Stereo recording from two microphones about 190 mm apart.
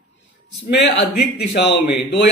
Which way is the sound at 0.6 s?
65° left (ahead or behind).